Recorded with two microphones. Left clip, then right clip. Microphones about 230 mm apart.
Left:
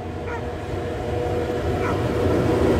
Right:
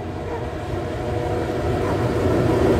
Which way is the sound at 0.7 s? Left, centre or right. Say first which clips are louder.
Even; centre.